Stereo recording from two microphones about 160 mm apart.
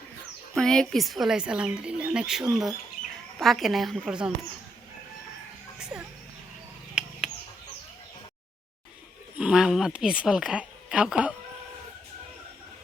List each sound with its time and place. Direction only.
0.5 s speech: 5° left (ahead or behind)
5.8 s a sound: 5° right (ahead or behind)
7.0 s bird: 5° right (ahead or behind)
9.4 s speech: 5° right (ahead or behind)